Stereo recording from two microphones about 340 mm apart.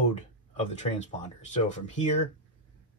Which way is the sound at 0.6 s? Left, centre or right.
Left.